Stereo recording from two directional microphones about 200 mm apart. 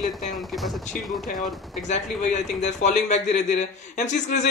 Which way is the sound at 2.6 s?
35° left (ahead or behind).